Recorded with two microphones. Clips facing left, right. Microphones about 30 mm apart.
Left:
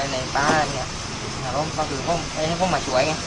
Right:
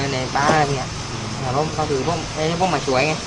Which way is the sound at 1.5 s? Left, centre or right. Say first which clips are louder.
Right 4 dB; centre.